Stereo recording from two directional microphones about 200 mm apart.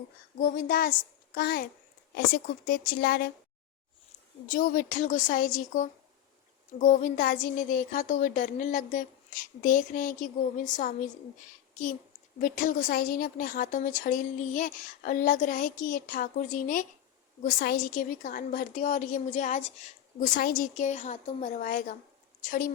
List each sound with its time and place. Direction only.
0.4 s a woman's voice: 45° left (ahead or behind)
4.4 s a woman's voice: 45° left (ahead or behind)
11.3 s a woman's voice: 40° left (ahead or behind)